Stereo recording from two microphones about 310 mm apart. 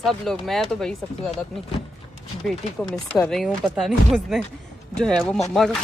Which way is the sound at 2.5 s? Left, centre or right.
Centre.